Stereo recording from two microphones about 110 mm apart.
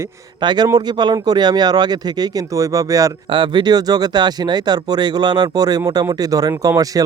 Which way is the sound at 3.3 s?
45° right (ahead or behind).